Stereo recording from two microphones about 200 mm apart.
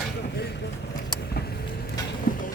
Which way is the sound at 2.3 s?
45° left (ahead or behind).